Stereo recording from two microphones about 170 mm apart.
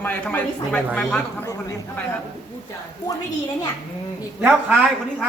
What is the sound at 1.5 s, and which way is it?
Speech, 20° left (ahead or behind).